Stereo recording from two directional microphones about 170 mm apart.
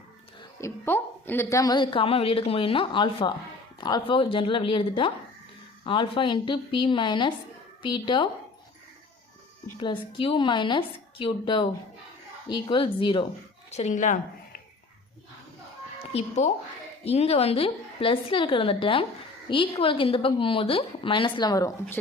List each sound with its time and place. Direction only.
0.6 s a woman's voice: 15° left (ahead or behind); by 8.3 s 30° left (ahead or behind)
9.8 s a woman's voice: 30° left (ahead or behind)
13.7 s speech: 40° left (ahead or behind)
16.1 s a woman's voice: 40° left (ahead or behind); by 22.0 s 15° left (ahead or behind)